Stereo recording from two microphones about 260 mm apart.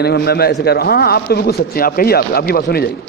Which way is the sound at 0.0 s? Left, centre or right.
Left.